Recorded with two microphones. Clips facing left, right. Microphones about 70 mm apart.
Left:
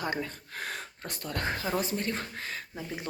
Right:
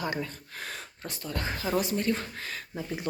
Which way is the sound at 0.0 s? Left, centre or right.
Left.